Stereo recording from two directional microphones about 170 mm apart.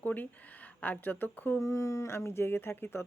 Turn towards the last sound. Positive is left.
turn(degrees=15)  # may be behind; listen again after turning